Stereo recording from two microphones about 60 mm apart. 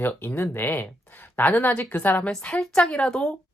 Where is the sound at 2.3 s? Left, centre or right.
Centre.